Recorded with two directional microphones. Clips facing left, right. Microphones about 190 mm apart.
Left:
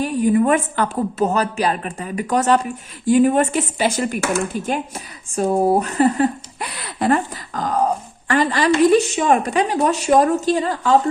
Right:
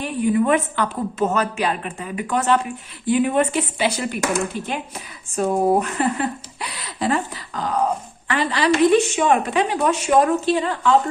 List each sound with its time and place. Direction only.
0.0 s a woman's voice: 40° left (ahead or behind)